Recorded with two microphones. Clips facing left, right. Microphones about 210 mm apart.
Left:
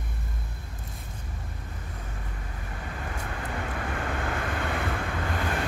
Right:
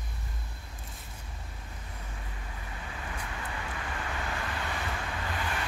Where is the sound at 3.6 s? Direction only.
55° left (ahead or behind).